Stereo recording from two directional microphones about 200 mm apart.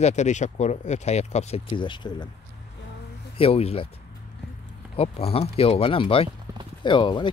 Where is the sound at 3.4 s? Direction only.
30° left (ahead or behind).